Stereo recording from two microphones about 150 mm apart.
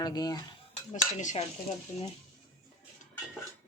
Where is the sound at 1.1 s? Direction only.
50° left (ahead or behind).